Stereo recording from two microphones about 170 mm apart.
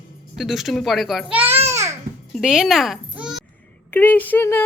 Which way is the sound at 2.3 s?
5° right (ahead or behind).